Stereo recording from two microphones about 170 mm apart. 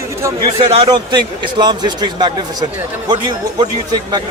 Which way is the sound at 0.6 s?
35° right (ahead or behind).